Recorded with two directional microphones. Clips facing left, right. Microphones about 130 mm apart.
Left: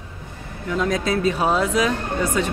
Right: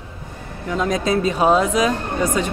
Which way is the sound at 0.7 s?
20° right (ahead or behind).